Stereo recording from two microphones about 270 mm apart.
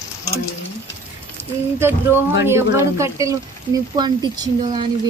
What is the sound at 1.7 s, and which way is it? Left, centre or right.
Speech, centre.